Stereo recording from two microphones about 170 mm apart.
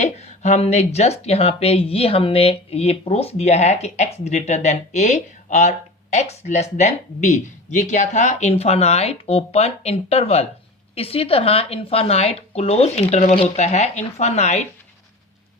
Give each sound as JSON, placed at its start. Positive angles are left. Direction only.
{"t": 0.0, "sound": "speech", "side_deg": 40}